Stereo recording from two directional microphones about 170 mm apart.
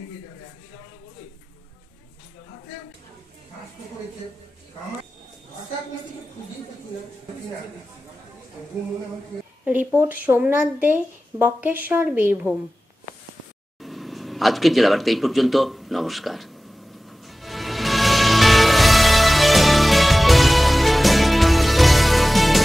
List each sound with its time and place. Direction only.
9.9 s speech: 10° right (ahead or behind)
13.7 s speech: centre (ahead or behind)
17.0 s music: centre (ahead or behind)